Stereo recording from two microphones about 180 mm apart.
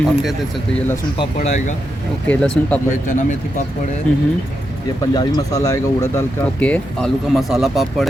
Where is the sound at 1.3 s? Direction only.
40° left (ahead or behind).